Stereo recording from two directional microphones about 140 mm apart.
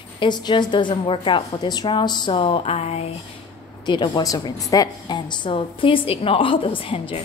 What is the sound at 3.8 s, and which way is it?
Speech, 35° left (ahead or behind).